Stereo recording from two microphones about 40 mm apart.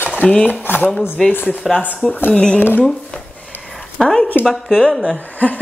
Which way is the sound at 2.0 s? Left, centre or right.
Right.